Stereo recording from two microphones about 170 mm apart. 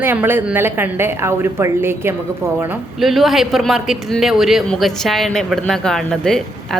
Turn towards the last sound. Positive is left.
turn(degrees=5)  # may be behind; listen again after turning